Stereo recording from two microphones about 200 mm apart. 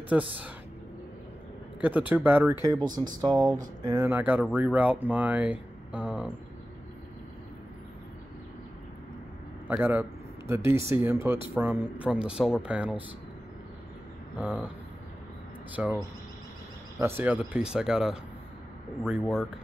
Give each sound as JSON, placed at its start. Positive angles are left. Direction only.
{"t": 0.1, "sound": "speech", "side_deg": -5}
{"t": 1.8, "sound": "speech", "side_deg": -10}
{"t": 9.7, "sound": "speech", "side_deg": -10}
{"t": 14.3, "sound": "speech", "side_deg": -5}
{"t": 15.7, "sound": "speech", "side_deg": -10}
{"t": 17.0, "sound": "speech", "side_deg": -10}